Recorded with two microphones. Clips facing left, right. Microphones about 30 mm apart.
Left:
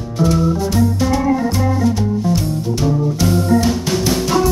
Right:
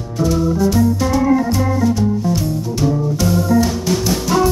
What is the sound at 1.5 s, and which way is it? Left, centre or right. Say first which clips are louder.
Organ: even; centre.